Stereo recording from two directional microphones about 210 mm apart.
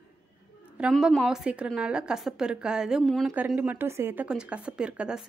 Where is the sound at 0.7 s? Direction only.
5° right (ahead or behind).